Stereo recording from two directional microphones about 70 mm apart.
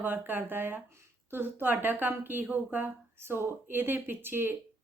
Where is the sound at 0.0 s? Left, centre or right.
Right.